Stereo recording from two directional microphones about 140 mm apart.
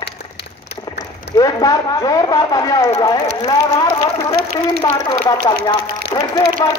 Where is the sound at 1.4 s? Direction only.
25° left (ahead or behind).